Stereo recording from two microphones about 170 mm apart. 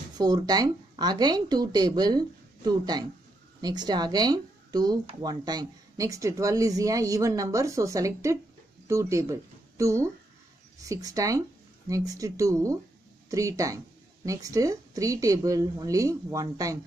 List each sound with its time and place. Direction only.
0.2 s speech: 25° right (ahead or behind)